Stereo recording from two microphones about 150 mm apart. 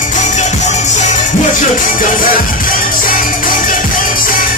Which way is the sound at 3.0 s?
65° left (ahead or behind).